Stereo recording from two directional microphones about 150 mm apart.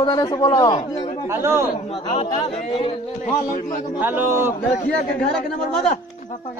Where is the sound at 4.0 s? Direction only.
15° right (ahead or behind).